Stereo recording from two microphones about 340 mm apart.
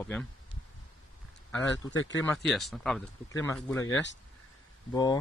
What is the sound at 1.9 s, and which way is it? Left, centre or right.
Speech, left.